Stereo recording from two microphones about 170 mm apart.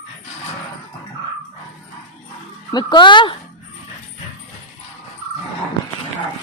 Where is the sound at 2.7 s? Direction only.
25° left (ahead or behind).